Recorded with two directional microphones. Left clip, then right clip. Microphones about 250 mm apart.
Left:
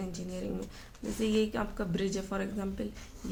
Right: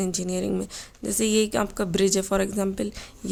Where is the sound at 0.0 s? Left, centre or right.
Right.